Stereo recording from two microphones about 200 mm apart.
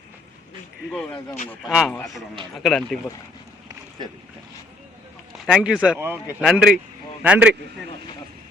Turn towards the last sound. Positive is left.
turn(degrees=-5)  # may be behind; listen again after turning